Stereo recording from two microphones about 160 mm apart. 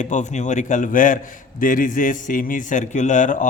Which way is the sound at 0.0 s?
50° left (ahead or behind).